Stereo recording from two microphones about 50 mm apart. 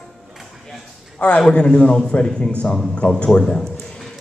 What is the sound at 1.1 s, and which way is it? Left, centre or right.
A man's voice, left.